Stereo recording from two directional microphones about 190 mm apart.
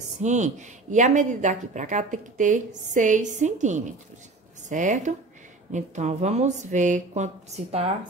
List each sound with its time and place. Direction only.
0.2 s a woman's voice: 40° right (ahead or behind)